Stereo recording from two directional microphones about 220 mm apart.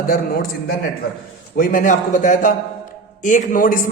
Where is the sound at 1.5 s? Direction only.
40° left (ahead or behind).